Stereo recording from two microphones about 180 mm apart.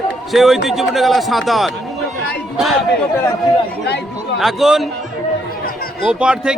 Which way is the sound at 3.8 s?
70° left (ahead or behind).